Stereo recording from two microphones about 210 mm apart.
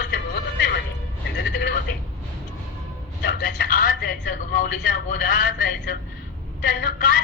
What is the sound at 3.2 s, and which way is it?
A woman's voice, 45° left (ahead or behind).